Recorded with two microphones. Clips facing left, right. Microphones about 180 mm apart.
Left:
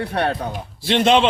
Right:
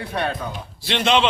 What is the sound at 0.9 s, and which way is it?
Speech, 50° left (ahead or behind).